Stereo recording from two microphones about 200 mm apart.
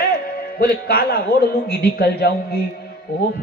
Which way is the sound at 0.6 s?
50° left (ahead or behind).